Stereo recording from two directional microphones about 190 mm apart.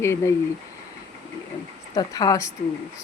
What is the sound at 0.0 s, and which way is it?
Speech, 15° left (ahead or behind).